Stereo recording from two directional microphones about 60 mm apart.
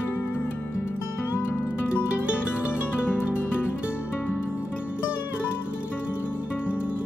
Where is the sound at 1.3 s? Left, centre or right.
Left.